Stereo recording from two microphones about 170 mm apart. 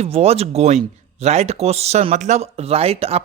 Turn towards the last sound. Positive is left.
turn(degrees=-35)  # may be behind; listen again after turning